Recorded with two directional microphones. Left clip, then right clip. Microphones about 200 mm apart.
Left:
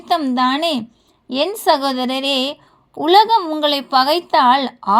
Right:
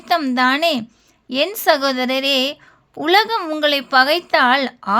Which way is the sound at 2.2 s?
45° right (ahead or behind).